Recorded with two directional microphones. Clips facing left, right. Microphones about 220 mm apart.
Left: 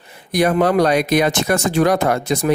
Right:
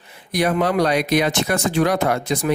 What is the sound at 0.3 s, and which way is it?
Speech, 50° left (ahead or behind).